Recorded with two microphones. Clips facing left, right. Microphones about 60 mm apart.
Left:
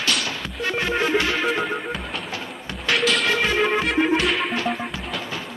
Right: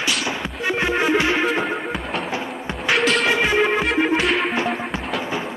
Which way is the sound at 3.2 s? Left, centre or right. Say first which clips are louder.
Right 2 dB; centre.